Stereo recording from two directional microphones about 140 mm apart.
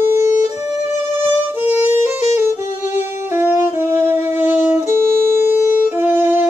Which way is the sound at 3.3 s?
15° right (ahead or behind).